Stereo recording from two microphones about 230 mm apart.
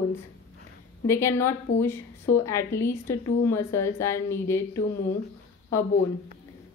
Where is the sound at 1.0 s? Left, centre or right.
Centre.